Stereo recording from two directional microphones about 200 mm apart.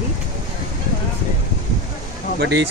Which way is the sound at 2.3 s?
60° right (ahead or behind).